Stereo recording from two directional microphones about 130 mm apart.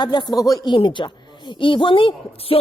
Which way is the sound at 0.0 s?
35° left (ahead or behind).